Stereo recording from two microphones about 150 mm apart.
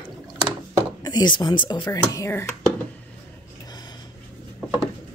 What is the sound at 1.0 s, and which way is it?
Speech, 30° left (ahead or behind).